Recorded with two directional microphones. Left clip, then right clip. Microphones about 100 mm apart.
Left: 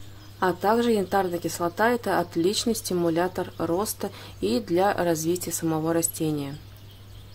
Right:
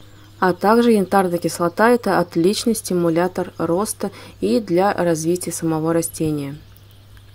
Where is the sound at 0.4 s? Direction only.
55° right (ahead or behind).